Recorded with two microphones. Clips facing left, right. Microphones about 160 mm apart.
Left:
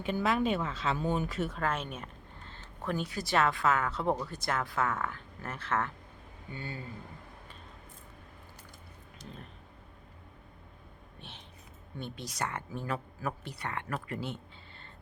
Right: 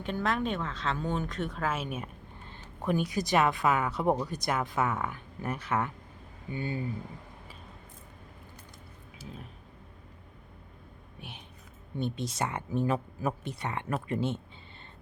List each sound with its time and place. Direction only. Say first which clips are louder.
0.0 s speech: left 1 dB; 5° left (ahead or behind); by 6.8 s 15° right (ahead or behind)
9.1 s speech: right 3 dB; 5° right (ahead or behind)
11.2 s a sound: right 4 dB; 15° right (ahead or behind)
11.9 s speech: right 6 dB; 20° right (ahead or behind)